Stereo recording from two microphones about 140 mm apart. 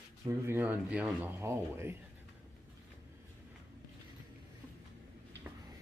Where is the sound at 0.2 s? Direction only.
15° right (ahead or behind).